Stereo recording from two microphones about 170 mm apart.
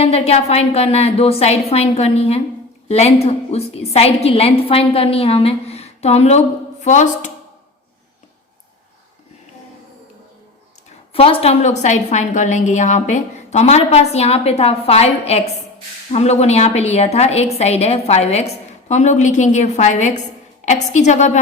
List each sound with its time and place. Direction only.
0.0 s a woman's voice: 35° left (ahead or behind)
11.1 s a woman's voice: 35° left (ahead or behind)